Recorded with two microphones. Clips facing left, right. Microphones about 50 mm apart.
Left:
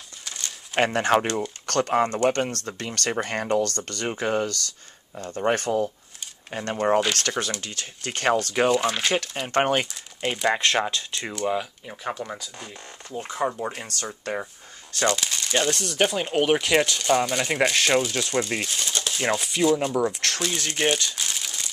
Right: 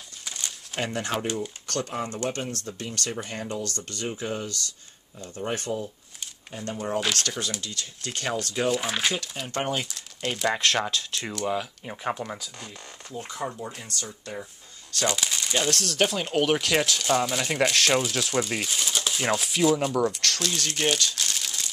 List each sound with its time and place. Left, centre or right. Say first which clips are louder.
0.7 s speech: left 9 dB; left
6.5 s speech: left 8 dB; left
7.2 s speech: left 3 dB; left
8.7 s speech: left 3 dB; centre
9.1 s speech: left 7 dB; left
9.8 s speech: left 3 dB; centre
11.8 s speech: right 1 dB; centre
12.5 s speech: left 2 dB; centre
13.7 s speech: left 5 dB; left
15.0 s crumpling: left 3 dB; centre
15.6 s speech: left 1 dB; centre